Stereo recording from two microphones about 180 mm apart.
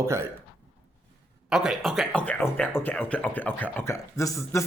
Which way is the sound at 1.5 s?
Centre (ahead or behind).